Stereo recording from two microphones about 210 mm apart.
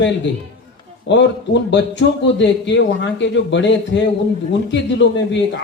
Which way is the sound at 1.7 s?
60° left (ahead or behind).